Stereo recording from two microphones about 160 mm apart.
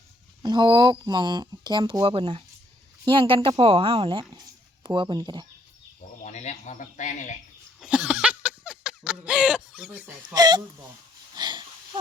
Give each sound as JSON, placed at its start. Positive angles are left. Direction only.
{"t": 0.4, "sound": "speech", "side_deg": -30}
{"t": 6.2, "sound": "speech", "side_deg": 45}
{"t": 7.8, "sound": "a sound", "side_deg": -5}
{"t": 9.7, "sound": "speech", "side_deg": -5}
{"t": 10.2, "sound": "speech", "side_deg": -25}
{"t": 11.3, "sound": "wheeze", "side_deg": -25}